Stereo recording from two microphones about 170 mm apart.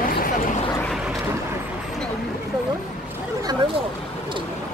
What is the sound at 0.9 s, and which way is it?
Speech, centre (ahead or behind).